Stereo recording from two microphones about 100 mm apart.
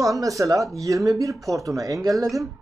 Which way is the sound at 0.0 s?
35° right (ahead or behind).